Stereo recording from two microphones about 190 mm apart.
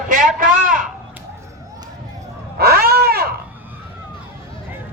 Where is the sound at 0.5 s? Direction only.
45° right (ahead or behind).